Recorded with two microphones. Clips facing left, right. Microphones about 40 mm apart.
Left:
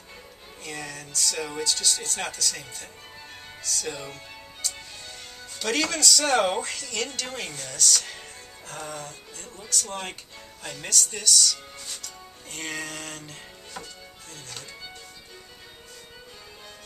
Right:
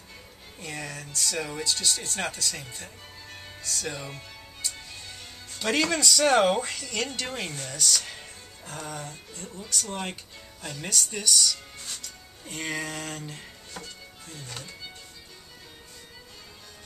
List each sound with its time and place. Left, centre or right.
0.6 s speech: right
4.1 s music: right
5.6 s speech: centre
10.9 s speech: centre